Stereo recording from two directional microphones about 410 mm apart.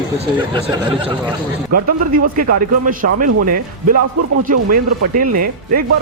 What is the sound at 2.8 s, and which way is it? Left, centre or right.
Speech, centre.